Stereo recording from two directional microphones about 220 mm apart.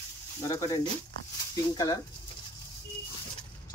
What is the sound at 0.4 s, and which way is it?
Speech, 15° left (ahead or behind).